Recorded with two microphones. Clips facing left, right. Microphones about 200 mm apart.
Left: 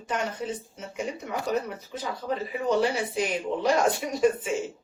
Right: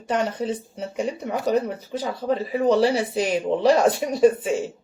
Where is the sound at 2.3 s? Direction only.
35° right (ahead or behind).